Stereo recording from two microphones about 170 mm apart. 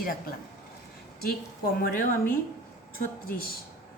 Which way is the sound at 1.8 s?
60° left (ahead or behind).